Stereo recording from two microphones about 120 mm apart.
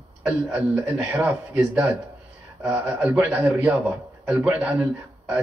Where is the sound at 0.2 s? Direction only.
15° right (ahead or behind).